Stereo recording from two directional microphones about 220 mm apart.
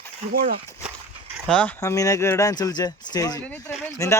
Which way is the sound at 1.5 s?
5° left (ahead or behind).